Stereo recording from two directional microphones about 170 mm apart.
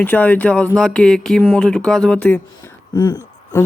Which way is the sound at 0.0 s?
10° left (ahead or behind).